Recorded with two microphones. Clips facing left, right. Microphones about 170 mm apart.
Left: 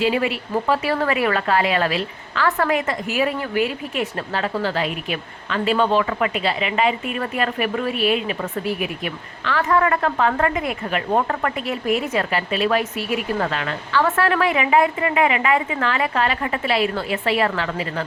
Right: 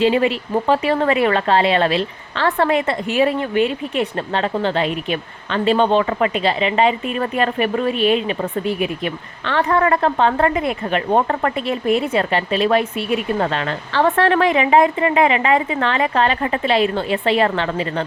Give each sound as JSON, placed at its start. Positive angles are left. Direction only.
{"t": 0.0, "sound": "speech", "side_deg": -30}